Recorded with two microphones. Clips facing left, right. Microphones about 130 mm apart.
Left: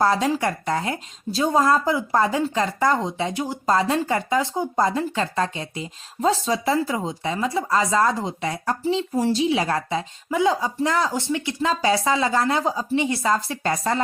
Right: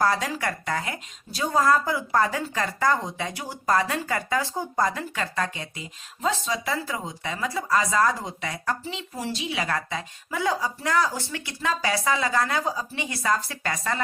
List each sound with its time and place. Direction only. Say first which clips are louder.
0.0 s speech: left 4 dB; 25° left (ahead or behind)